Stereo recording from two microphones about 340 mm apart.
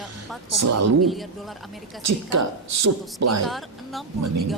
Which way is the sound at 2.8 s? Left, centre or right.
Right.